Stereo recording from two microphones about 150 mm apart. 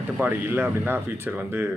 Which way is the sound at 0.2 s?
15° right (ahead or behind).